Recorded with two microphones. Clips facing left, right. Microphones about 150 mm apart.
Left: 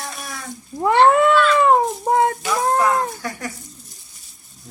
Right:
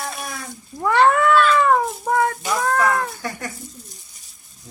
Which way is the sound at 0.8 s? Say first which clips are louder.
Left 2 dB; 25° left (ahead or behind).